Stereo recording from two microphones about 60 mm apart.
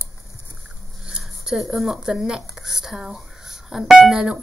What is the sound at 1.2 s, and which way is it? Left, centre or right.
Speech, centre.